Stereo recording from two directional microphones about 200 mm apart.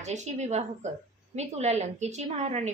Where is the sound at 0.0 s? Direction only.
35° right (ahead or behind).